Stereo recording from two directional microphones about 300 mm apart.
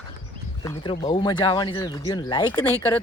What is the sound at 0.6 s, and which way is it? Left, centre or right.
Speech, centre.